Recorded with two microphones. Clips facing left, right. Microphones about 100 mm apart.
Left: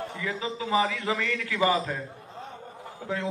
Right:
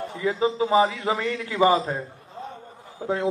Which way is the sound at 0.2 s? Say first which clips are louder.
Right 11 dB; 30° right (ahead or behind).